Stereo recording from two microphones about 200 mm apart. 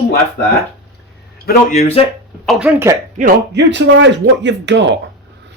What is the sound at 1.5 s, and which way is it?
Speech, 35° left (ahead or behind).